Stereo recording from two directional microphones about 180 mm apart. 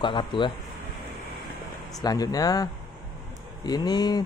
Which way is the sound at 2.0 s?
20° left (ahead or behind).